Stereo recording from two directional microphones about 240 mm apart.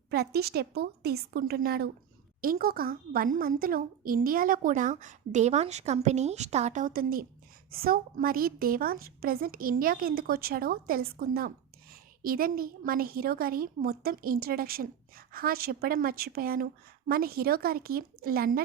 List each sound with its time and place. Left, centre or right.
0.1 s a woman's voice: right